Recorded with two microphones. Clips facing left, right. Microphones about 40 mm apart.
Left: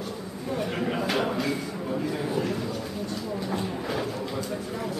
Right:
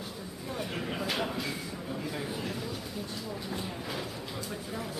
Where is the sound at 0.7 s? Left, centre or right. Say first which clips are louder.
Left 5 dB; left.